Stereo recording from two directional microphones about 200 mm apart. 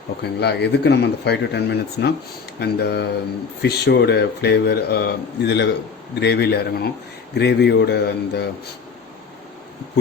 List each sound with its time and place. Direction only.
0.2 s speech: 55° left (ahead or behind)